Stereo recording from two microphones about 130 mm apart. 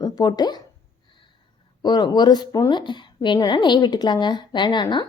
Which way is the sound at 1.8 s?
35° left (ahead or behind).